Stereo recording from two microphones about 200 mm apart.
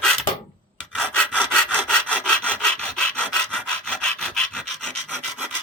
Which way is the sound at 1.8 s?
5° left (ahead or behind).